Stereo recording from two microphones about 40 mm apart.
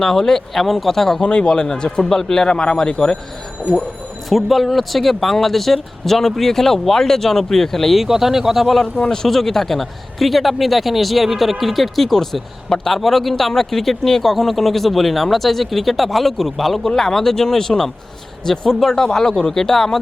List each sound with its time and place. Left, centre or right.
0.0 s speech: centre
1.2 s a man's voice: left
4.3 s a man's voice: centre
7.9 s a man's voice: centre
8.8 s a man's voice: centre